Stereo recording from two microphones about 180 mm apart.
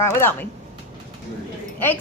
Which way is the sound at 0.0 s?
15° left (ahead or behind).